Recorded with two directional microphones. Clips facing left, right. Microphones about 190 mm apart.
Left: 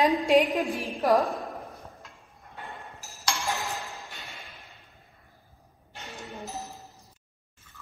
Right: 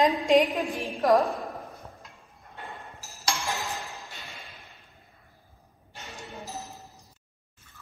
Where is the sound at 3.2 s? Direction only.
Centre (ahead or behind).